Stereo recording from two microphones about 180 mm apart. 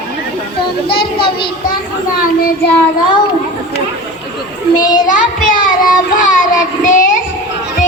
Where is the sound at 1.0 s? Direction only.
30° left (ahead or behind).